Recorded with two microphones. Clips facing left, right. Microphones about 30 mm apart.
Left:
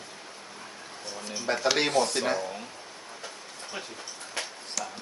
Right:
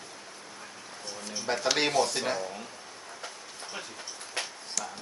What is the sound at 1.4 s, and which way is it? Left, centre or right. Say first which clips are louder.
Speech: left 2 dB; centre.